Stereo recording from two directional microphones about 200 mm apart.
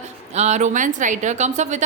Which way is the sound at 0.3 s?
35° right (ahead or behind).